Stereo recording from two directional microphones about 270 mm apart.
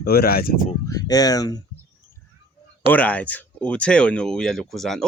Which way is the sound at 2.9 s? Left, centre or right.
Centre.